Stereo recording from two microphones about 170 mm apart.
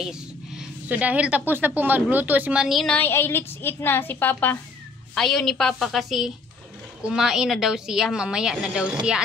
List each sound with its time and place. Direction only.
0.0 s a woman's voice: 5° right (ahead or behind)